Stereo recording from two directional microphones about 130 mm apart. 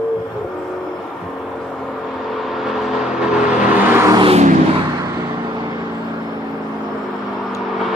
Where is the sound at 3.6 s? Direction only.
15° right (ahead or behind).